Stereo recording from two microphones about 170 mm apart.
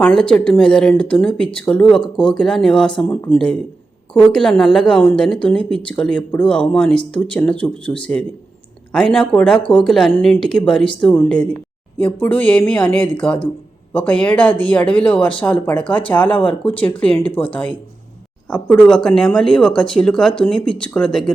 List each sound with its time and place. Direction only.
0.0 s a woman's voice: 5° left (ahead or behind)
9.6 s speech: 30° left (ahead or behind)
10.2 s a woman's voice: 5° left (ahead or behind)